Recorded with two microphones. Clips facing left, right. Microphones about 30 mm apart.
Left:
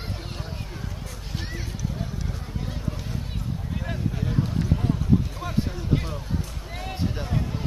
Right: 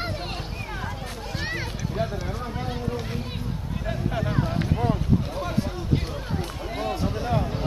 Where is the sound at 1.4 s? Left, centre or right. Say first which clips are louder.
Right 4 dB; right.